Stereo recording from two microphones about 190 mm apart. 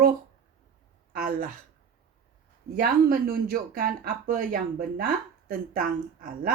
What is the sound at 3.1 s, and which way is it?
Speech, 50° right (ahead or behind).